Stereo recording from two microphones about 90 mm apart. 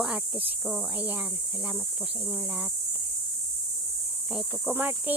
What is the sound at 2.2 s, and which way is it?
Speech, 20° right (ahead or behind).